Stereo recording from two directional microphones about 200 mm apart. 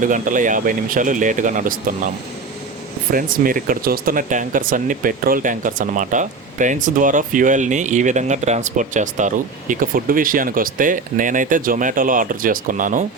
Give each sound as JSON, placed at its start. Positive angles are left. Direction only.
{"t": 0.0, "sound": "speech", "side_deg": -40}
{"t": 3.1, "sound": "speech", "side_deg": -45}